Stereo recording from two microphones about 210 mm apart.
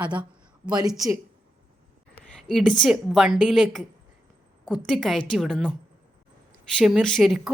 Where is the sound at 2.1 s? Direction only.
Centre (ahead or behind).